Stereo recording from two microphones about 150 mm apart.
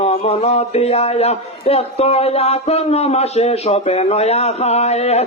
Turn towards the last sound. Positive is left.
turn(degrees=45)  # may be behind; listen again after turning